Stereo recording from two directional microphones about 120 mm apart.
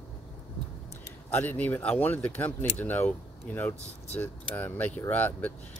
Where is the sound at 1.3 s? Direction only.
15° left (ahead or behind).